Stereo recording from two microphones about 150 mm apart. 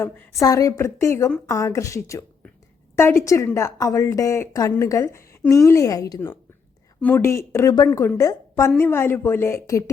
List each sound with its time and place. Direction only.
0.0 s a woman's voice: 20° left (ahead or behind)